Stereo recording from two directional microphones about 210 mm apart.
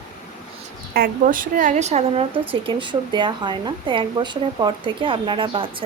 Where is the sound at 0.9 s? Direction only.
45° right (ahead or behind).